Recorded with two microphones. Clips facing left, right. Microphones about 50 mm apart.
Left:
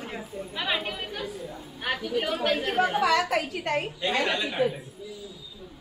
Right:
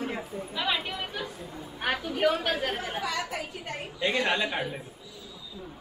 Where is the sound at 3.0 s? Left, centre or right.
Left.